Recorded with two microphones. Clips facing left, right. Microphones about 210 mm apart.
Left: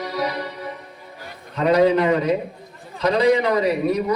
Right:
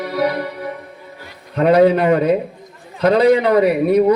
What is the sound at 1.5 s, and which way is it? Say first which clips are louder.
A man's voice: right 4 dB; 60° right (ahead or behind).